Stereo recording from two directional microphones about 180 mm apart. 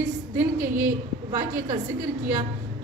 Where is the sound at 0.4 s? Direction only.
15° right (ahead or behind).